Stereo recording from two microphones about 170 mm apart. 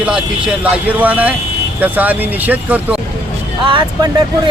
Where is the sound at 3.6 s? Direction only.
30° right (ahead or behind).